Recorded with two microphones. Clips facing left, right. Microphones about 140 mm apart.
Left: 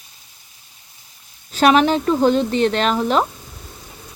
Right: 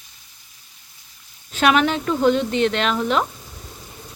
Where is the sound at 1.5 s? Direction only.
35° left (ahead or behind).